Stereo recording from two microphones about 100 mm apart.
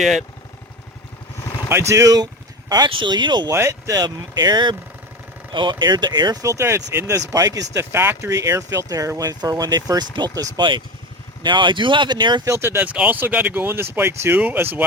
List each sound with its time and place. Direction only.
0.0 s speech: centre (ahead or behind)
1.9 s speech: 35° right (ahead or behind)
3.5 s speech: 30° right (ahead or behind)
10.6 s speech: 55° right (ahead or behind)
12.5 s speech: 25° right (ahead or behind)